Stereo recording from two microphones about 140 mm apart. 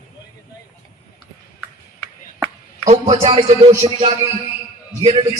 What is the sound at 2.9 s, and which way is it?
Music, 45° right (ahead or behind).